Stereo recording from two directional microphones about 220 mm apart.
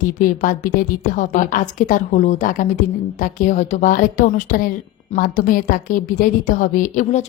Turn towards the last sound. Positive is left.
turn(degrees=35)  # may be behind; listen again after turning